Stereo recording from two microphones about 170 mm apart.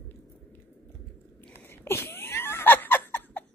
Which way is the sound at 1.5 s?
15° left (ahead or behind).